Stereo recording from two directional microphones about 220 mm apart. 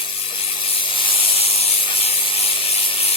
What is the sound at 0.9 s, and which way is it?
Spray, 25° left (ahead or behind).